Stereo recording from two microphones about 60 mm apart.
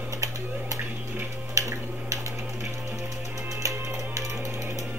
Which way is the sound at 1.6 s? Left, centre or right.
Right.